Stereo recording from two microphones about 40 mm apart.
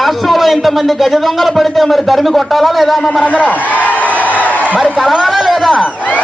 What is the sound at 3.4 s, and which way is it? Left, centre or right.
Speech, left.